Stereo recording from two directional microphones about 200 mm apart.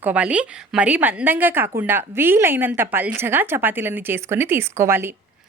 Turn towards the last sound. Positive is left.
turn(degrees=-10)  # may be behind; listen again after turning